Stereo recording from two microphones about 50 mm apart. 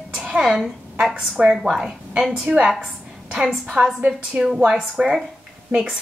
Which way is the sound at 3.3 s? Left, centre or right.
Centre.